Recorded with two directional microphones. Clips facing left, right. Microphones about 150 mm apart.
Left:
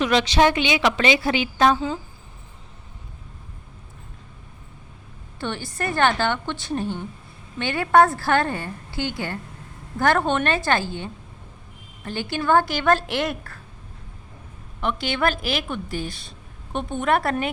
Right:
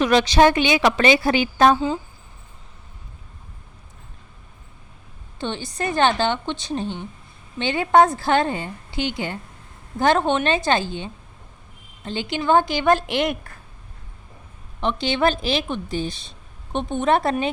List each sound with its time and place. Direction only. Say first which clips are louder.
0.0 s a woman's voice: right 3 dB; 45° right (ahead or behind)
5.4 s a woman's voice: right 1 dB; 20° right (ahead or behind)
14.8 s a woman's voice: right 3 dB; 25° right (ahead or behind)